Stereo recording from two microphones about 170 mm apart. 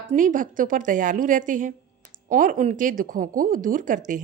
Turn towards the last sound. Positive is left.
turn(degrees=-50)  # may be behind; listen again after turning